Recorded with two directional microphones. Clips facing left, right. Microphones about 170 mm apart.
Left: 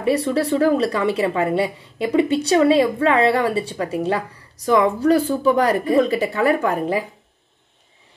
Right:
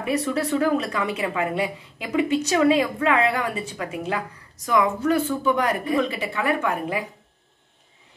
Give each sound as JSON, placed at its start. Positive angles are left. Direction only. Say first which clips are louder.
{"t": 0.0, "sound": "a woman's voice", "louder": "left 5 dB", "side_deg": 35}